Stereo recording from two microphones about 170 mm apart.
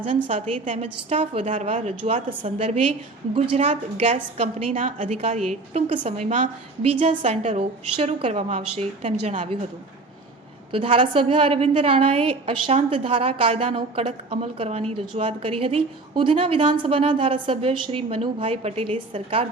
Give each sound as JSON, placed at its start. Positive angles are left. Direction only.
{"t": 0.3, "sound": "a woman's voice", "side_deg": -45}
{"t": 1.5, "sound": "a woman's voice", "side_deg": -45}
{"t": 10.7, "sound": "a woman's voice", "side_deg": -30}